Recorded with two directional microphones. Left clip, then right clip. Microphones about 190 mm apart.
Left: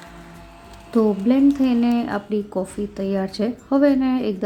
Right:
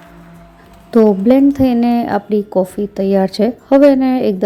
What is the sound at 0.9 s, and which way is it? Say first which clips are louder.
A woman's voice: right 9 dB; 30° right (ahead or behind).